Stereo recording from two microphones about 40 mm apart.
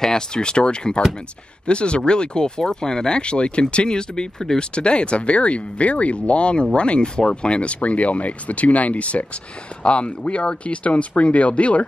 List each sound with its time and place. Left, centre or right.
0.0 s speech: centre; by 11.8 s left